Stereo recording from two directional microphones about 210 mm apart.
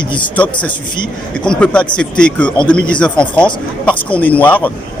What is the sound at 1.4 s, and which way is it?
Speech, 5° left (ahead or behind).